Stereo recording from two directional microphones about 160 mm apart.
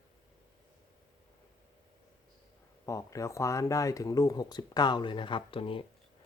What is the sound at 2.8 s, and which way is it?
Speech, 20° left (ahead or behind).